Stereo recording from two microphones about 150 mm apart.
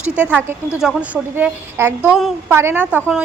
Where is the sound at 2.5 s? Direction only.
15° right (ahead or behind).